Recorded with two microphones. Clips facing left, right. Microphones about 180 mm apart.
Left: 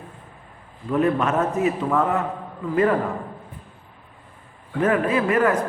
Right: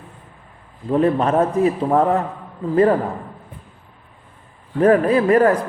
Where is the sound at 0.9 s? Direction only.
30° right (ahead or behind).